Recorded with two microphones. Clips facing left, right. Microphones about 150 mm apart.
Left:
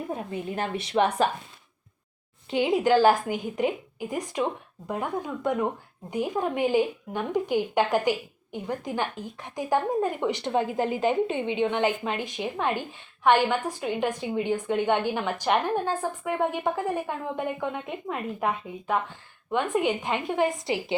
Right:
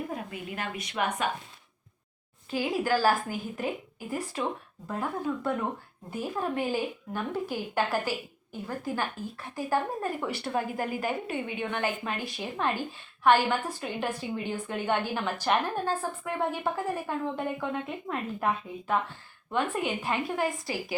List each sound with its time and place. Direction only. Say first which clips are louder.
0.1 s a woman's voice: left 5 dB; 30° left (ahead or behind)
2.5 s a woman's voice: left 6 dB; 20° left (ahead or behind)